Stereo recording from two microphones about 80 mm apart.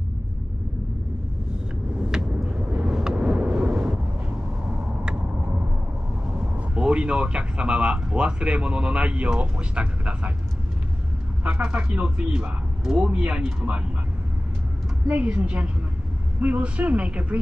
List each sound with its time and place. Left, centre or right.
2.9 s vehicle: centre
3.6 s a sound: centre
6.7 s speech: centre
11.4 s speech: centre
15.0 s speech: centre